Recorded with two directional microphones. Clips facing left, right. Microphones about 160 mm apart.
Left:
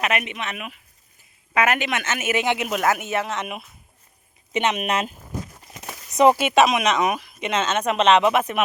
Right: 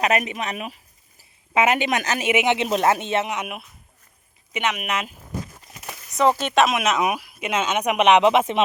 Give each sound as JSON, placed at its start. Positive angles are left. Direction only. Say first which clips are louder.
{"t": 0.0, "sound": "speech", "louder": "right 3 dB", "side_deg": -35}
{"t": 2.3, "sound": "speech", "louder": "right 3 dB", "side_deg": -20}
{"t": 3.2, "sound": "speech", "louder": "even", "side_deg": -10}
{"t": 4.5, "sound": "speech", "louder": "left 3 dB", "side_deg": 30}
{"t": 6.1, "sound": "speech", "louder": "left 3 dB", "side_deg": 15}